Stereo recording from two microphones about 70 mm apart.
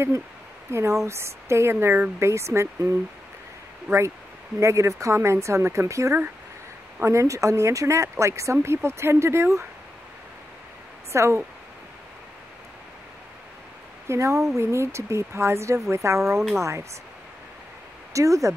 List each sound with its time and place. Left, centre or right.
0.7 s speech: right
4.6 s speech: right
11.1 s speech: right
14.0 s speech: right
16.2 s speech: centre
16.5 s speech: right
18.1 s speech: right